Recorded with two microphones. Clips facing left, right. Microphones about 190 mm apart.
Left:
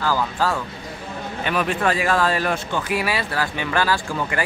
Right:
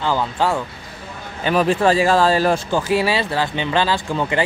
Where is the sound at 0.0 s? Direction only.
25° right (ahead or behind).